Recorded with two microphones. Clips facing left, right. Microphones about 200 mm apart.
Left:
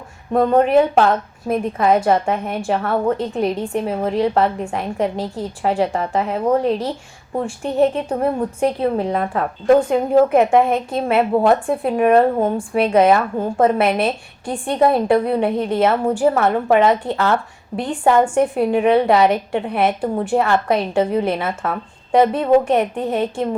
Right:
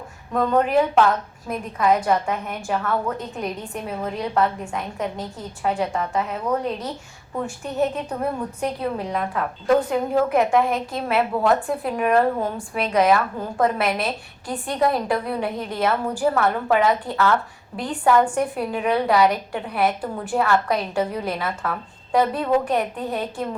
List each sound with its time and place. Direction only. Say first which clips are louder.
0.3 s a woman's voice: left 5 dB; 30° left (ahead or behind)